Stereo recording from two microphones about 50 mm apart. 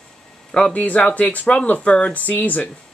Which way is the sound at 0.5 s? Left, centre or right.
Left.